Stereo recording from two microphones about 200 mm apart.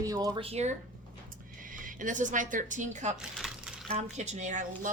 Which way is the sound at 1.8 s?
40° right (ahead or behind).